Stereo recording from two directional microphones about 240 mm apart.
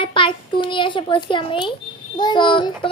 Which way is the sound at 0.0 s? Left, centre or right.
Left.